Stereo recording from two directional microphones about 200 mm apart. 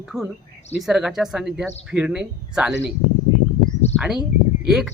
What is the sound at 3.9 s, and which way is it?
Speech, 5° right (ahead or behind).